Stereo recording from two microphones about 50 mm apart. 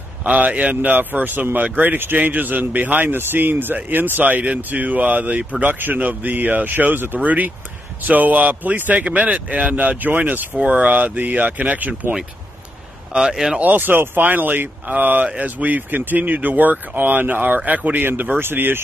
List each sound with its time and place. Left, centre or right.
0.2 s speech: right
5.6 s speech: right
10.5 s speech: right
13.1 s speech: centre
13.6 s speech: right